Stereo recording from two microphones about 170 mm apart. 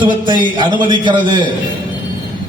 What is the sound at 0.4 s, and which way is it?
A man's voice, 25° right (ahead or behind).